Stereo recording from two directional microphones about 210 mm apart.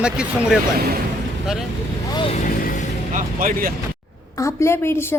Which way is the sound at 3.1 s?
40° right (ahead or behind).